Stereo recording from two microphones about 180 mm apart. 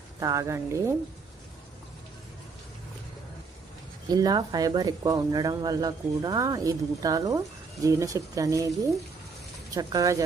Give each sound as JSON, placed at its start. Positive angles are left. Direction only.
{"t": 0.2, "sound": "speech", "side_deg": -20}
{"t": 4.1, "sound": "speech", "side_deg": -20}
{"t": 9.7, "sound": "speech", "side_deg": -20}